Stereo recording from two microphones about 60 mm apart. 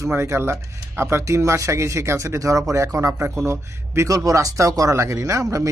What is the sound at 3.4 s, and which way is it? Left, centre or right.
Speech, right.